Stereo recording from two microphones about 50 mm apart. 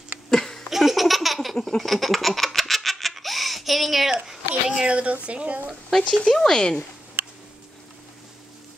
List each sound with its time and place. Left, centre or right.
0.3 s a sound: centre
0.7 s laughter: centre
4.3 s speech: centre
5.9 s speech: centre